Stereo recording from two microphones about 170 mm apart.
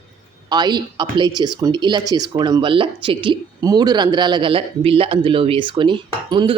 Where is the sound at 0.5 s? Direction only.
25° right (ahead or behind).